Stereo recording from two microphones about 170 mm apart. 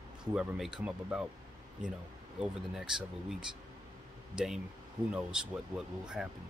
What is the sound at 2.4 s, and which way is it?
Speech, 5° right (ahead or behind).